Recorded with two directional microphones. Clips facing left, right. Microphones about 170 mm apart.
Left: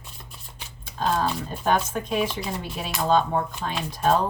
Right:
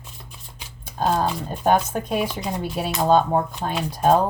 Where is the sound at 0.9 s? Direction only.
45° right (ahead or behind).